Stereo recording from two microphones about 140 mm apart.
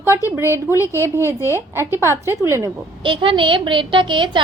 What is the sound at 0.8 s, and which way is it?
Speech, 20° left (ahead or behind).